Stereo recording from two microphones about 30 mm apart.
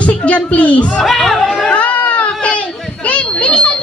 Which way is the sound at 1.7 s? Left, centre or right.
Left.